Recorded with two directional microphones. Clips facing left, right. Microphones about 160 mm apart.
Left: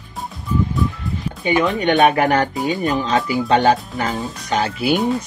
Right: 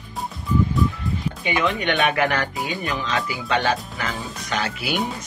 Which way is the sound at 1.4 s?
35° left (ahead or behind).